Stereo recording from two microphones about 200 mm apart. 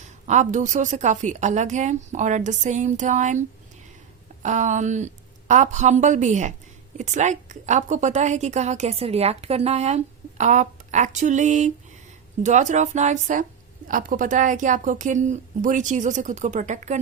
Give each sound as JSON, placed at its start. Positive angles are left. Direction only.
{"t": 0.0, "sound": "a woman's voice", "side_deg": -35}
{"t": 4.4, "sound": "a woman's voice", "side_deg": -40}